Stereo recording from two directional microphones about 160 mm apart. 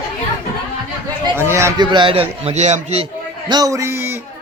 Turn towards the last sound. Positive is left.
turn(degrees=-15)  # may be behind; listen again after turning